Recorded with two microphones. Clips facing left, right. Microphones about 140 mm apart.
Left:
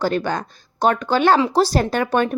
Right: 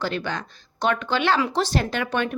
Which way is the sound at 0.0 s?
45° left (ahead or behind).